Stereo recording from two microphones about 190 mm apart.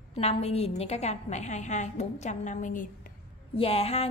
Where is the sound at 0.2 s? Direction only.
30° left (ahead or behind).